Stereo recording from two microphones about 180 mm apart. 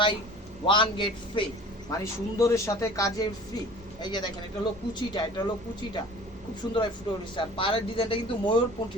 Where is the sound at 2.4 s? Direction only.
15° left (ahead or behind).